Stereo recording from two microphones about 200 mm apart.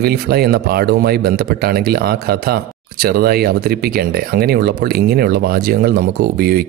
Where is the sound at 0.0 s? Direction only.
50° right (ahead or behind).